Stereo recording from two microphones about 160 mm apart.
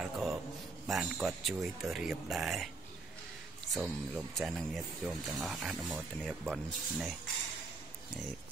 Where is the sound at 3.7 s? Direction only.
Centre (ahead or behind).